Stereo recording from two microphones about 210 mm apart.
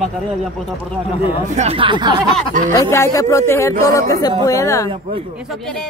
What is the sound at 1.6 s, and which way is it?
Speech, 25° right (ahead or behind).